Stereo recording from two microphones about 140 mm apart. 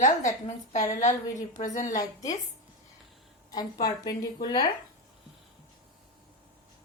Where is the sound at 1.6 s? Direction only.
60° left (ahead or behind).